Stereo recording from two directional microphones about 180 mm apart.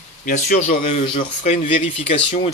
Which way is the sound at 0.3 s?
50° left (ahead or behind).